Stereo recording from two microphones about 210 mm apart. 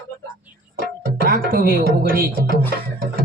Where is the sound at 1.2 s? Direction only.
45° right (ahead or behind).